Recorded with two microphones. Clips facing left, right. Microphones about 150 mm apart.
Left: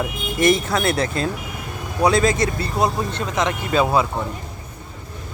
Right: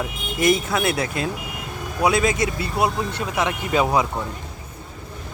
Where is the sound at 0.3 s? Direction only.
5° right (ahead or behind).